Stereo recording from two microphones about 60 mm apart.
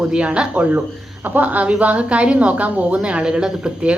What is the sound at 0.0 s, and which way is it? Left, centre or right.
A woman's voice, centre.